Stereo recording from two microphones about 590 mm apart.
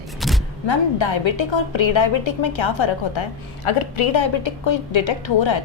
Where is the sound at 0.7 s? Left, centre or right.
Left.